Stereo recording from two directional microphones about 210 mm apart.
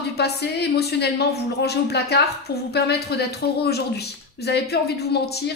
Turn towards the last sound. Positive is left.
turn(degrees=50)  # may be behind; listen again after turning